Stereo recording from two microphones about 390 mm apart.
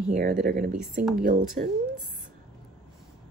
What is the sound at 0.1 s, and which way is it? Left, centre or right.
Speech, centre.